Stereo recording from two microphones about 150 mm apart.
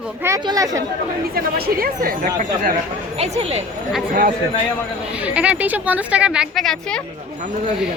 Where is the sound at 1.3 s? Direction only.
80° right.